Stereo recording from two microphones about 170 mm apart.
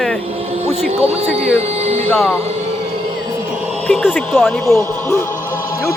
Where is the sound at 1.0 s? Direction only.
35° right (ahead or behind).